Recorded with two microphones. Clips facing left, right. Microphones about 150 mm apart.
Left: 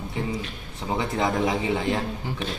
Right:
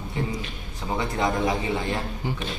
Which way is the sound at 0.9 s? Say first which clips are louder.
Left 1 dB; 20° left (ahead or behind).